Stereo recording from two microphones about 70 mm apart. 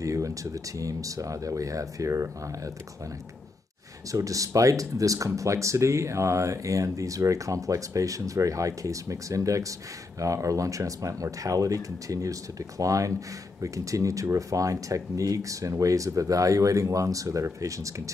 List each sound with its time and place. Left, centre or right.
0.0 s speech: right
4.1 s speech: right